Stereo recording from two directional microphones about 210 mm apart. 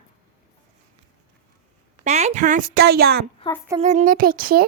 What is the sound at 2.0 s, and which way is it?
A woman's voice, 30° right (ahead or behind).